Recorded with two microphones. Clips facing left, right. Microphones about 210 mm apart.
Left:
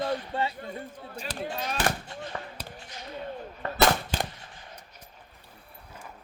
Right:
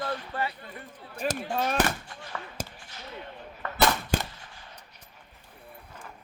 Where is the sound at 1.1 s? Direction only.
50° right (ahead or behind).